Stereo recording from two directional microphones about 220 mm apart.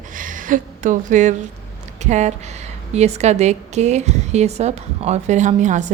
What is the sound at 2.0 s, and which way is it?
A woman's voice, 30° right (ahead or behind).